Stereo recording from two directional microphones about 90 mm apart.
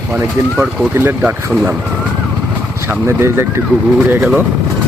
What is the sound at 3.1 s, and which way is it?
Speech, 25° right (ahead or behind).